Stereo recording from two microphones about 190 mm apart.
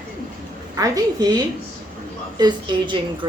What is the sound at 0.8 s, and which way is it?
Speech, 20° right (ahead or behind).